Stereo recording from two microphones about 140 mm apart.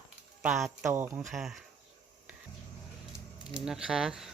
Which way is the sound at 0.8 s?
15° right (ahead or behind).